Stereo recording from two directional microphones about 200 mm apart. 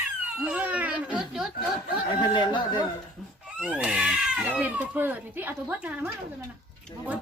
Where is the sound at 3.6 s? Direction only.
5° right (ahead or behind).